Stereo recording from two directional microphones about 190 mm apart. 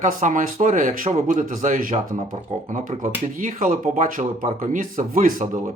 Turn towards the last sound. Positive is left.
turn(degrees=-45)  # may be behind; listen again after turning